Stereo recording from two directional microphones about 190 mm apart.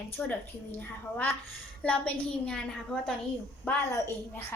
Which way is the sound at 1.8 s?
5° left (ahead or behind).